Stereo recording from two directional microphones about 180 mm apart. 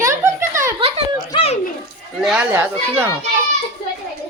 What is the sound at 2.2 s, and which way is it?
Speech, 5° right (ahead or behind).